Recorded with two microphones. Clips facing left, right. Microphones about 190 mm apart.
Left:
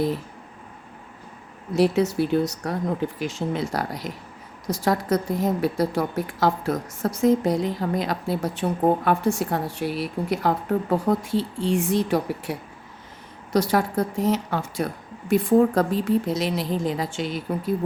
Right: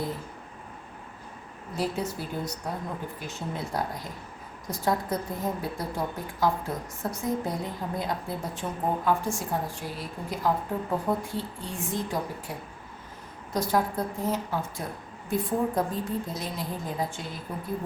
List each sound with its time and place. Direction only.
1.7 s speech: 75° left (ahead or behind)
3.2 s a woman's voice: 90° left
15.3 s a woman's voice: 90° left